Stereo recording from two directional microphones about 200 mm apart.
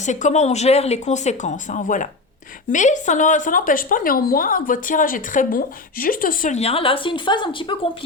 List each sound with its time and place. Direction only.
0.0 s a woman's voice: 35° left (ahead or behind)